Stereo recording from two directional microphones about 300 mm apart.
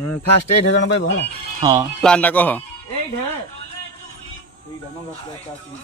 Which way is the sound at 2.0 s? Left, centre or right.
Centre.